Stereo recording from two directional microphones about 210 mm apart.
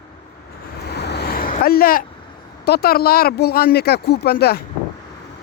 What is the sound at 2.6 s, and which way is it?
Speech, 50° left (ahead or behind).